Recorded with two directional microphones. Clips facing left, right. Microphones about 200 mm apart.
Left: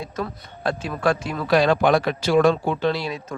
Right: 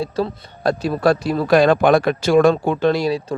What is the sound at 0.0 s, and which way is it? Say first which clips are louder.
Speech: right 7 dB; 35° right (ahead or behind).